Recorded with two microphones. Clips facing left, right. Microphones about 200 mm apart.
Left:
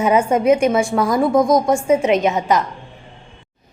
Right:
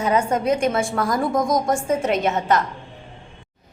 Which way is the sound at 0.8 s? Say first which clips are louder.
Left 5 dB; centre (ahead or behind).